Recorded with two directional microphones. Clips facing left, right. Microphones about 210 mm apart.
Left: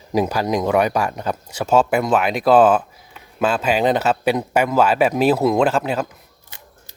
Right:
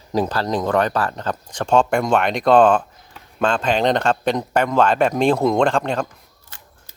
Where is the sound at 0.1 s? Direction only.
10° left (ahead or behind).